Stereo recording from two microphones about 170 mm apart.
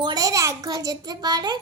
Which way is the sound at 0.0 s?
25° right (ahead or behind).